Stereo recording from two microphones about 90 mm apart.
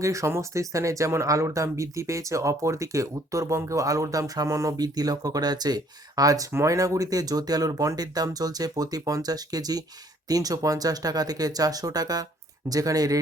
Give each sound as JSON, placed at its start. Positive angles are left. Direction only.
{"t": 0.0, "sound": "speech", "side_deg": -35}